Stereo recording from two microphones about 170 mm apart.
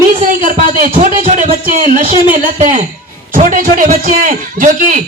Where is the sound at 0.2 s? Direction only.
55° right (ahead or behind).